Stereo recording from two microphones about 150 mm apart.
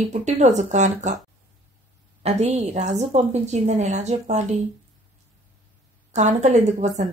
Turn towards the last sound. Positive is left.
turn(degrees=-50)  # may be behind; listen again after turning